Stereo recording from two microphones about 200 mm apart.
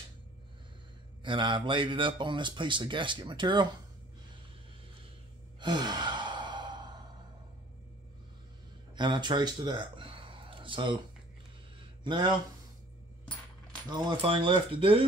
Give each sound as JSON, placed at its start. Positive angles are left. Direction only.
{"t": 1.2, "sound": "speech", "side_deg": -25}
{"t": 5.6, "sound": "sigh", "side_deg": -20}
{"t": 8.9, "sound": "speech", "side_deg": -20}
{"t": 12.0, "sound": "speech", "side_deg": -25}
{"t": 13.8, "sound": "speech", "side_deg": -20}